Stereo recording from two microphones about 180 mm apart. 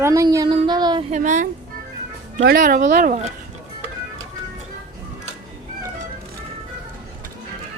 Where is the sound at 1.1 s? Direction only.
45° right (ahead or behind).